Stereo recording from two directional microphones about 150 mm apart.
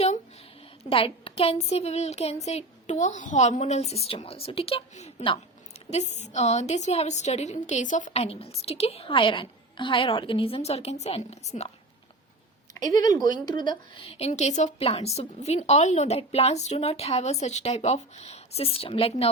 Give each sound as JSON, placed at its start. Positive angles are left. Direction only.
{"t": 0.9, "sound": "a woman's voice", "side_deg": 35}
{"t": 12.7, "sound": "a woman's voice", "side_deg": 25}